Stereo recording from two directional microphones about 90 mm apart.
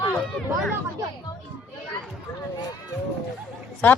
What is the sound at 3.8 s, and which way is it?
Speech, 20° left (ahead or behind).